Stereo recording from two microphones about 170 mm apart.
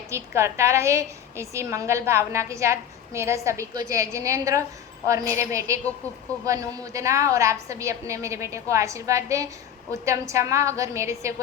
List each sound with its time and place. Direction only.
0.1 s a woman's voice: 15° right (ahead or behind)